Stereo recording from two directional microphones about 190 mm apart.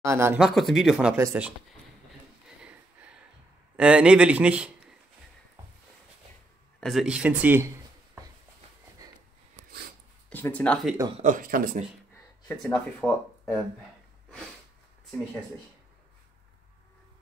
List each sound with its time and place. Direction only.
0.0 s speech: 15° right (ahead or behind)
1.1 s speech: 10° right (ahead or behind)
2.4 s a sound: 5° right (ahead or behind)
3.7 s speech: 5° right (ahead or behind)
6.8 s speech: centre (ahead or behind)
10.3 s speech: 10° left (ahead or behind)
11.2 s speech: 45° right (ahead or behind)
12.4 s speech: 10° left (ahead or behind)